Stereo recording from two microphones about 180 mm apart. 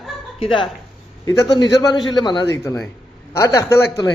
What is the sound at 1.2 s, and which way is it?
A child's voice, 20° left (ahead or behind).